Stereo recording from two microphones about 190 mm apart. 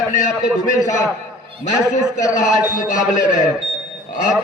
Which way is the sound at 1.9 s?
40° left (ahead or behind).